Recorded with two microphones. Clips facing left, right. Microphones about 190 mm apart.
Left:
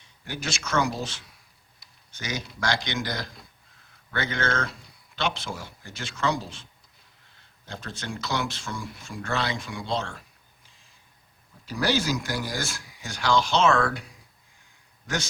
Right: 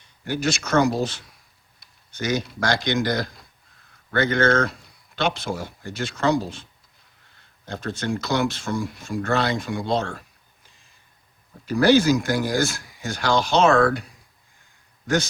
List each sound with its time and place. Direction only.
0.3 s speech: 55° right (ahead or behind)
2.1 s speech: 55° right (ahead or behind)
7.7 s speech: 50° right (ahead or behind)
11.6 s speech: 55° right (ahead or behind)
13.4 s speech: 40° right (ahead or behind)